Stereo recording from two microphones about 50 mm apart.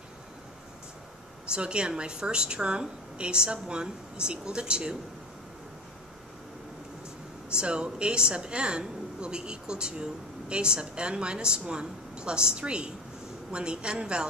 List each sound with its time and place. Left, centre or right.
1.5 s a woman's voice: centre
7.5 s a woman's voice: centre